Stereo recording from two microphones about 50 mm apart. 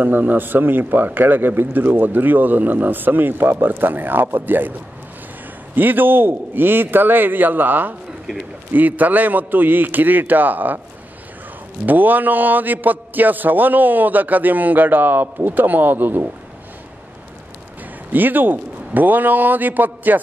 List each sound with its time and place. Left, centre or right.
0.0 s a man's voice: right
5.8 s a man's voice: right
11.8 s a man's voice: right
18.1 s a man's voice: right